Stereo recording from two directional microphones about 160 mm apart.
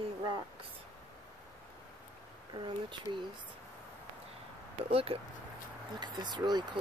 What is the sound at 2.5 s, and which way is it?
Speech, 30° right (ahead or behind).